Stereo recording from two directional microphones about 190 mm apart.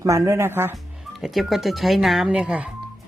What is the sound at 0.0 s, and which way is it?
Speech, 15° right (ahead or behind).